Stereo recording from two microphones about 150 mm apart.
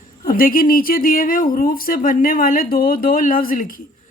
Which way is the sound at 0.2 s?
70° left (ahead or behind).